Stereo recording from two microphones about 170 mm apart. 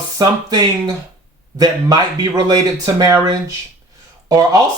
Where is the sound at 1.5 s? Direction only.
20° right (ahead or behind).